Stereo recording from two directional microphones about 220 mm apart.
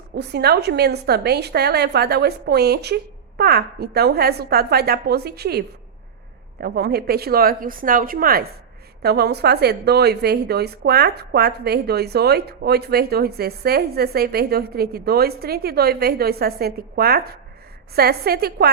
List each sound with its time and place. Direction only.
0.2 s a woman's voice: 50° right (ahead or behind)